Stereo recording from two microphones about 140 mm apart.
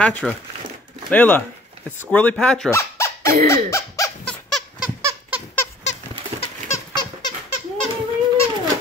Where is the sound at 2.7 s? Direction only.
20° left (ahead or behind).